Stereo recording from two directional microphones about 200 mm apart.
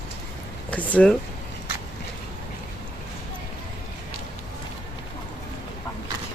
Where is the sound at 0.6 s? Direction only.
5° left (ahead or behind).